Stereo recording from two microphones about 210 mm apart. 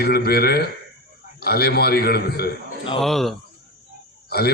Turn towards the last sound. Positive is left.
turn(degrees=50)  # may be behind; listen again after turning